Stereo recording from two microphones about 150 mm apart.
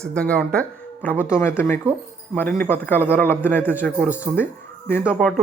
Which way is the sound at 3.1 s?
15° left (ahead or behind).